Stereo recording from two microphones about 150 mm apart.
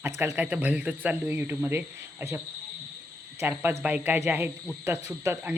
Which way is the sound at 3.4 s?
15° right (ahead or behind).